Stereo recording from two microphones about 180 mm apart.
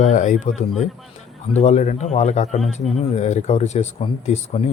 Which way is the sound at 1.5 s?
40° left (ahead or behind).